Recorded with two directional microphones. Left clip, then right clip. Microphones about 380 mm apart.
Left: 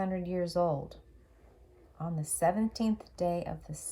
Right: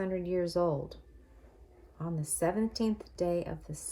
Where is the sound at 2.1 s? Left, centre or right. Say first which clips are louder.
Left 2 dB; centre.